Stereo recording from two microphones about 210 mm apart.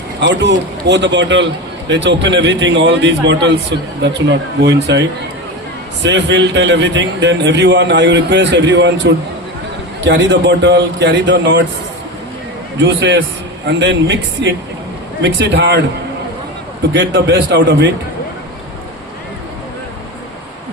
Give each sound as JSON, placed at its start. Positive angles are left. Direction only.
{"t": 0.2, "sound": "a man's voice", "side_deg": -55}
{"t": 12.8, "sound": "a man's voice", "side_deg": -60}
{"t": 16.9, "sound": "a man's voice", "side_deg": -60}